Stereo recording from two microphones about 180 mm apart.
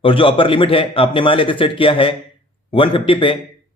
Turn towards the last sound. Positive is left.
turn(degrees=30)  # may be behind; listen again after turning